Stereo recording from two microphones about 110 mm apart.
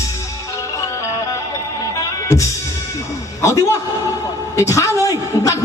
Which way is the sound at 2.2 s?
30° left (ahead or behind).